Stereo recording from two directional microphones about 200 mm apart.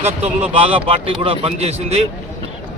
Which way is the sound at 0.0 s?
30° right (ahead or behind).